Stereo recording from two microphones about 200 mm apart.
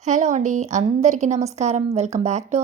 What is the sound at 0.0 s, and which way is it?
A woman's voice, 35° right (ahead or behind).